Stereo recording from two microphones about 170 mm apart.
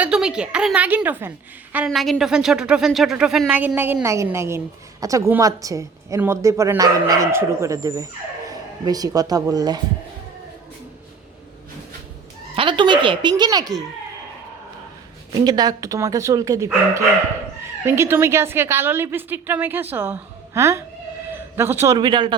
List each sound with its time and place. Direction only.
0.0 s speech: 5° right (ahead or behind); by 9.8 s 20° right (ahead or behind)
12.5 s speech: 30° right (ahead or behind)
15.4 s a man's voice: 25° right (ahead or behind)
21.9 s speech: 25° right (ahead or behind)